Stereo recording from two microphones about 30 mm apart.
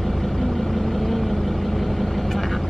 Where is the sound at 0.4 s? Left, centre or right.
Centre.